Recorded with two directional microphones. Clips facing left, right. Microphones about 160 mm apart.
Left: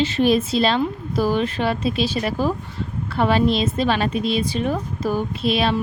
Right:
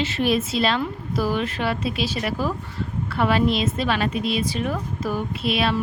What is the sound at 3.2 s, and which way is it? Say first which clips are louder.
A woman's voice: left 2 dB; 30° left (ahead or behind).